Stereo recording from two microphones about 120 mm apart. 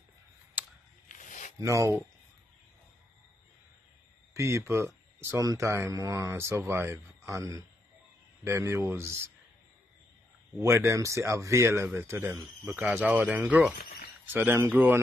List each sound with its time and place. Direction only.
0.6 s a sound: 15° right (ahead or behind)
1.0 s zipper: 90° left
1.6 s speech: 25° right (ahead or behind)
4.3 s speech: 25° right (ahead or behind)
10.6 s speech: 25° right (ahead or behind)
12.9 s speech: 15° right (ahead or behind)